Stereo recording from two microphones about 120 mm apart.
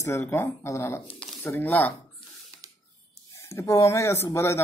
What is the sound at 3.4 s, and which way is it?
Speech, 25° left (ahead or behind).